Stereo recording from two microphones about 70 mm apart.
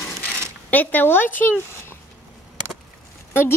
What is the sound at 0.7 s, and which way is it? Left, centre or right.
Speech, left.